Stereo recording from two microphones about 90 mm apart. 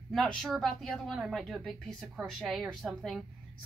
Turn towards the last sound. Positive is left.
turn(degrees=0)  # may be behind; listen again after turning